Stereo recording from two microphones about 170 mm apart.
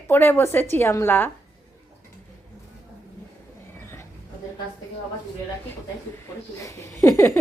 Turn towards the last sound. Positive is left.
turn(degrees=15)  # may be behind; listen again after turning